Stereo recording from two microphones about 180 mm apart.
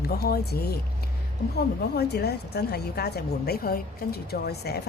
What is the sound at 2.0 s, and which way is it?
A woman's voice, 65° left (ahead or behind).